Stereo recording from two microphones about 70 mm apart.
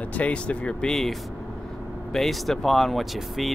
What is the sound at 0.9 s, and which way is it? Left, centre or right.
Speech, centre.